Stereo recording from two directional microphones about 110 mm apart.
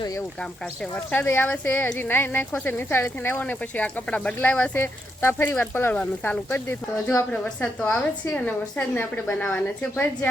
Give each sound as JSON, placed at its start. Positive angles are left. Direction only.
{"t": 0.3, "sound": "speech", "side_deg": 10}
{"t": 7.3, "sound": "speech", "side_deg": 10}